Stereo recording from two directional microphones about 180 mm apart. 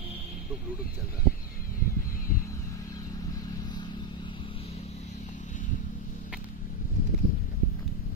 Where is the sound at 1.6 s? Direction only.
50° left (ahead or behind).